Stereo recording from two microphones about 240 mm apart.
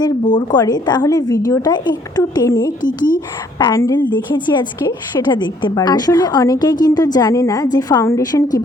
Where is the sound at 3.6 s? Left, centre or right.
Centre.